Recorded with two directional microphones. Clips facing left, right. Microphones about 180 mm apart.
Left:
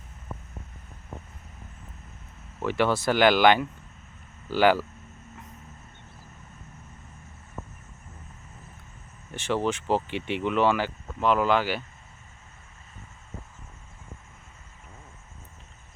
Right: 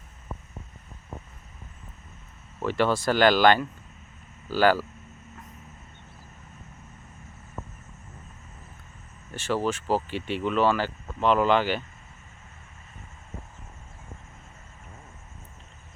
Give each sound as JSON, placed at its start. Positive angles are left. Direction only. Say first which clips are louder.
{"t": 2.6, "sound": "speech", "louder": "even", "side_deg": 15}
{"t": 9.6, "sound": "speech", "louder": "left 1 dB", "side_deg": -10}
{"t": 9.9, "sound": "speech", "louder": "even", "side_deg": 20}